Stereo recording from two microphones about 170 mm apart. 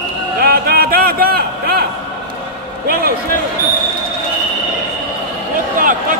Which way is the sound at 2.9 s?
60° right (ahead or behind).